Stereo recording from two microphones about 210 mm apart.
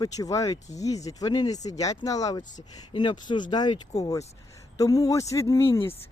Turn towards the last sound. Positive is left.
turn(degrees=20)  # may be behind; listen again after turning